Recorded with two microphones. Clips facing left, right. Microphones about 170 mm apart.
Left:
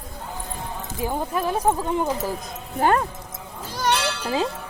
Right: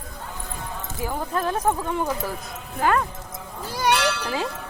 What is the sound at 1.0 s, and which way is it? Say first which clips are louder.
Speech: left 1 dB; 20° left (ahead or behind).